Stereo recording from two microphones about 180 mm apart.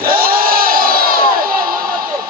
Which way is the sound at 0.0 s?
55° right (ahead or behind).